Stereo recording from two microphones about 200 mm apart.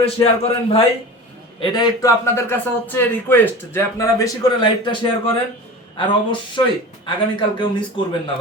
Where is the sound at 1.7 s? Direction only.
20° left (ahead or behind).